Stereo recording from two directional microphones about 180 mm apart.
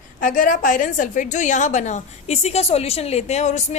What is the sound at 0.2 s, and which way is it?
A woman's voice, 50° left (ahead or behind).